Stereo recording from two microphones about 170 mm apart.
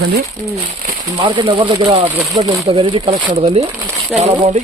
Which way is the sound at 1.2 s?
30° right (ahead or behind).